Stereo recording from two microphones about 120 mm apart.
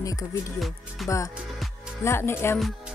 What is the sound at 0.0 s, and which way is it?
Speech, 30° left (ahead or behind).